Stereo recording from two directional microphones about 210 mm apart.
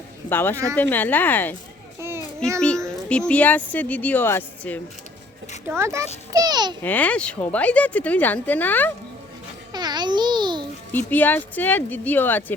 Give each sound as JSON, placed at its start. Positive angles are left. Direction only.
{"t": 0.3, "sound": "speech", "side_deg": 10}
{"t": 2.0, "sound": "a sound", "side_deg": -10}
{"t": 3.1, "sound": "speech", "side_deg": 5}
{"t": 5.6, "sound": "a child's voice", "side_deg": -10}
{"t": 6.8, "sound": "speech", "side_deg": 5}
{"t": 9.7, "sound": "babbling", "side_deg": -20}
{"t": 10.9, "sound": "speech", "side_deg": 10}